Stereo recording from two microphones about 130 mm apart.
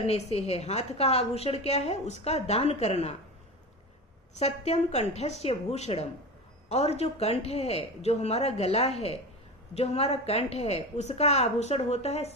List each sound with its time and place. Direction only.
0.0 s a woman's voice: 50° left (ahead or behind)
4.4 s a woman's voice: 55° left (ahead or behind)